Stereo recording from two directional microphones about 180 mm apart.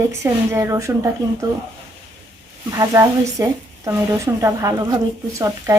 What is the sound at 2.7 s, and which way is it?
Speech, 20° right (ahead or behind).